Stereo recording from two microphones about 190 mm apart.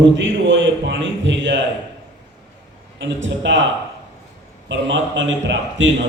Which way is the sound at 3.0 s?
70° right (ahead or behind).